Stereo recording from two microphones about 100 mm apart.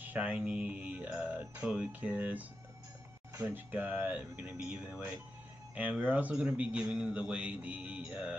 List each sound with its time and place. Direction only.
0.0 s a man's voice: 15° right (ahead or behind)